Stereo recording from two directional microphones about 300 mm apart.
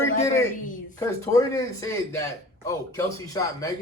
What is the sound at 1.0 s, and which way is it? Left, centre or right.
Speech, centre.